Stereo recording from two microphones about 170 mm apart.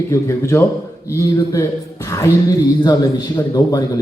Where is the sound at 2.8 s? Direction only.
25° left (ahead or behind).